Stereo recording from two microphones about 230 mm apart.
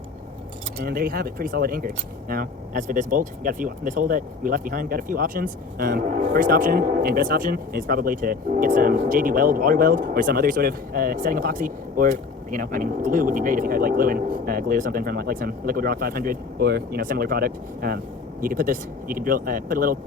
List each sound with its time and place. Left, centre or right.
0.8 s speech: right